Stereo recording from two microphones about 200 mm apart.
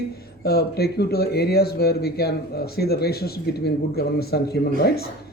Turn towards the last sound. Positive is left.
turn(degrees=50)  # may be behind; listen again after turning